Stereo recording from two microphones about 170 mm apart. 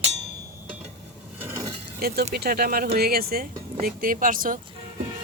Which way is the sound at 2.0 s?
65° right (ahead or behind).